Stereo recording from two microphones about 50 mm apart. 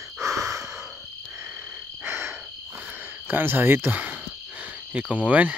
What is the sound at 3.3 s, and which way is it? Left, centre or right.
Speech, right.